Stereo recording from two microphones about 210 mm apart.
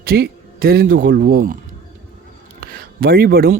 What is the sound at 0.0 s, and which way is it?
Speech, 45° right (ahead or behind).